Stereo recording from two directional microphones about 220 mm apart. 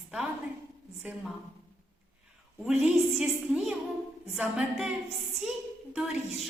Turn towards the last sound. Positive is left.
turn(degrees=0)  # may be behind; listen again after turning